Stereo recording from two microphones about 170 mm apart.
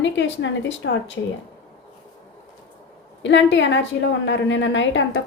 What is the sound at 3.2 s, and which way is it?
Speech, 90° left.